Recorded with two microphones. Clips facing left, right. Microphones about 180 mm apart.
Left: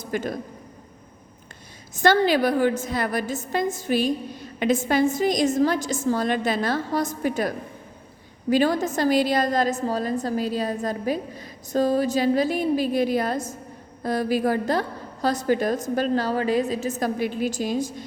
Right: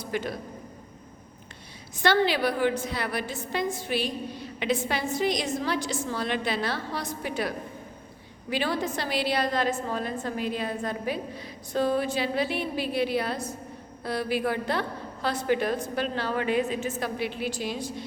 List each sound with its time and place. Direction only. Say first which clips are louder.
0.0 s a man's voice: left 3 dB; 45° left (ahead or behind)
2.0 s a woman's voice: left 5 dB; 45° left (ahead or behind)